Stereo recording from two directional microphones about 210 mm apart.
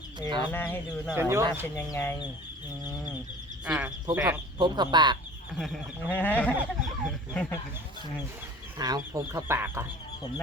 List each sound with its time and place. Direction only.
0.3 s speech: 20° right (ahead or behind)
0.5 s speech: 10° left (ahead or behind)
1.1 s speech: 10° right (ahead or behind)
1.7 s speech: 10° left (ahead or behind)
3.7 s speech: 5° right (ahead or behind)
4.6 s speech: 20° right (ahead or behind)
5.5 s speech: centre (ahead or behind)
6.6 s chicken: centre (ahead or behind)
8.8 s speech: 15° right (ahead or behind)